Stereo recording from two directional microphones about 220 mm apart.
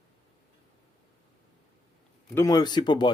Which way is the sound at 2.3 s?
15° left (ahead or behind).